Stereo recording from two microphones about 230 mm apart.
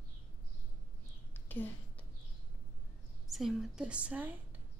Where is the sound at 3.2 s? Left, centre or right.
Centre.